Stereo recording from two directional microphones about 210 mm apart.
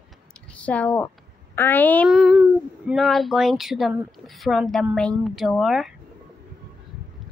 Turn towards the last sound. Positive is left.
turn(degrees=0)  # may be behind; listen again after turning